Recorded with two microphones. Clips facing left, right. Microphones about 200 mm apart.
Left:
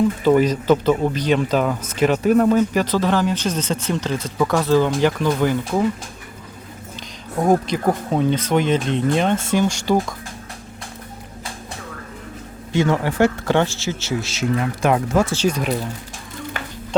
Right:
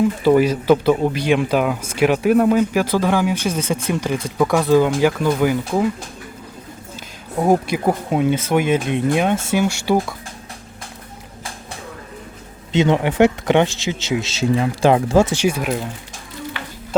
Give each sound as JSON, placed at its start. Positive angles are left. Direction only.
{"t": 0.0, "sound": "speech", "side_deg": -10}
{"t": 7.3, "sound": "speech", "side_deg": -10}
{"t": 12.7, "sound": "speech", "side_deg": -20}
{"t": 15.4, "sound": "speech", "side_deg": -10}